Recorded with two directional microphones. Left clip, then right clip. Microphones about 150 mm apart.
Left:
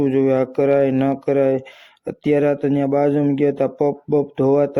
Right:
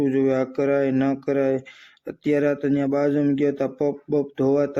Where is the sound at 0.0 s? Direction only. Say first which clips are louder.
Left 4 dB; 35° left (ahead or behind).